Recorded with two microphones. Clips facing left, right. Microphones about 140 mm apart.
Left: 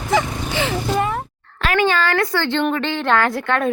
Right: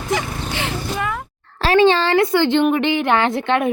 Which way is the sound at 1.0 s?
35° left (ahead or behind).